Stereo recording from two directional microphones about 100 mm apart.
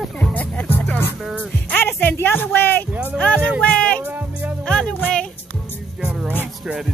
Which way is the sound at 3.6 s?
10° left (ahead or behind).